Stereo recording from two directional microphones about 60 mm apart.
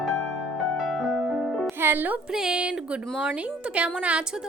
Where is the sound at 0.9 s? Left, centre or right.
Centre.